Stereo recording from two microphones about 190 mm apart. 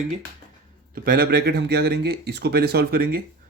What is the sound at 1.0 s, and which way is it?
Speech, 50° right (ahead or behind).